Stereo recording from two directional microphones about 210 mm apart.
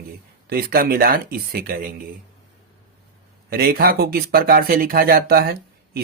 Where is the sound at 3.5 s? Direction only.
45° right (ahead or behind).